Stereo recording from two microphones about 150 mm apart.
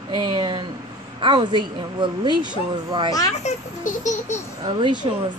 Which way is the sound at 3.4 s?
55° left (ahead or behind).